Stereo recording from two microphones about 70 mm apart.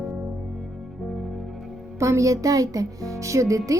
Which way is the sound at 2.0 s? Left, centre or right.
Right.